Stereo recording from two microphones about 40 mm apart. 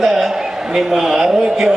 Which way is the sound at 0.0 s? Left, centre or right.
Centre.